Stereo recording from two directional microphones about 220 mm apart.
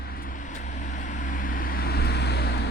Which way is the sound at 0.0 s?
40° left (ahead or behind).